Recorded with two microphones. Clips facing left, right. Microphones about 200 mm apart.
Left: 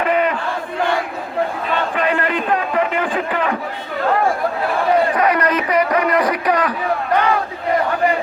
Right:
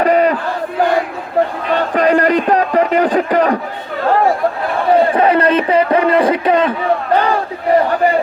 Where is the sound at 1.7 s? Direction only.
40° right (ahead or behind).